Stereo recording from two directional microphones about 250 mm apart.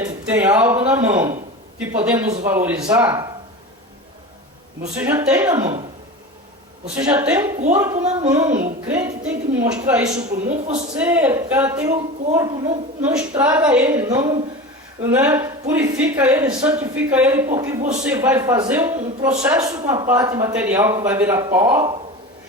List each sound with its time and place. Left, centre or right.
0.0 s a woman's voice: centre
4.9 s a woman's voice: centre
6.8 s a woman's voice: centre
7.9 s a woman's voice: right
8.3 s a woman's voice: centre
10.1 s a woman's voice: right
10.9 s a woman's voice: centre